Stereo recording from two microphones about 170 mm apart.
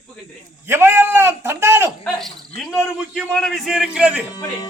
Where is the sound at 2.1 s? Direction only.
Centre (ahead or behind).